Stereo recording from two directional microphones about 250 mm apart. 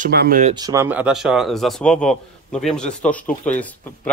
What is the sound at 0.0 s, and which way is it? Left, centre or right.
Speech, right.